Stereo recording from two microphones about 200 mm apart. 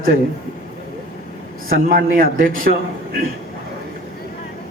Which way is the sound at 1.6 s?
45° right (ahead or behind).